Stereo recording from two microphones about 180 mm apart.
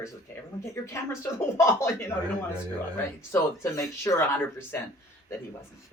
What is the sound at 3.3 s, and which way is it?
Speech, 15° left (ahead or behind).